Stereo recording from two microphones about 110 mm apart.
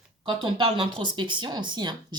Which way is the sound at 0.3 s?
50° right (ahead or behind).